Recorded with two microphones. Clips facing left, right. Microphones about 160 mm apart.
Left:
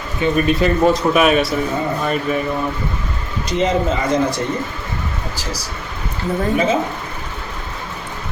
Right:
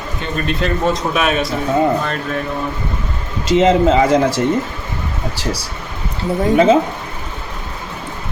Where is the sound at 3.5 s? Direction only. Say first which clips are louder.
Right 6 dB; 90° right.